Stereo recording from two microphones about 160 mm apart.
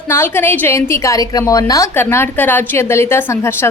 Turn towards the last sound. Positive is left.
turn(degrees=15)  # may be behind; listen again after turning